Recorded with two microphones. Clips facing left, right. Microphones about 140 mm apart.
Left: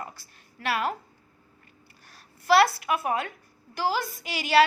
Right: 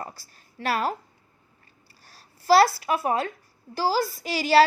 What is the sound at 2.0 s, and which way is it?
A woman's voice, 35° right (ahead or behind).